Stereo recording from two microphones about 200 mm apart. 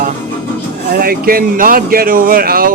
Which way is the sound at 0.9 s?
50° right (ahead or behind).